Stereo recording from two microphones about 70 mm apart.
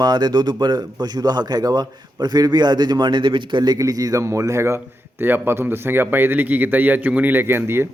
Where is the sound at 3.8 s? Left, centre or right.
Right.